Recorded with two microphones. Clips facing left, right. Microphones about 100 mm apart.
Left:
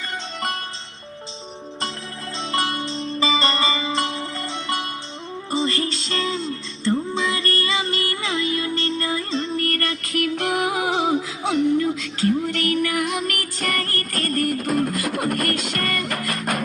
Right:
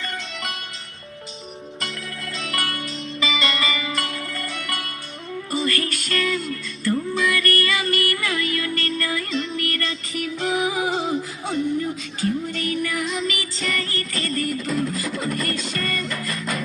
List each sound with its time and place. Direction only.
2.4 s music: 25° left (ahead or behind); by 16.6 s 60° left (ahead or behind)